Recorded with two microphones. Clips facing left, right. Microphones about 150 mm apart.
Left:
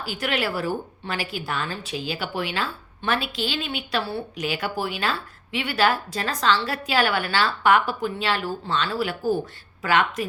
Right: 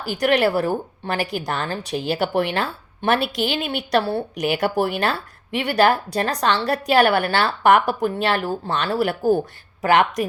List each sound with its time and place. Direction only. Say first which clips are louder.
0.2 s a woman's voice: right 8 dB; 40° right (ahead or behind)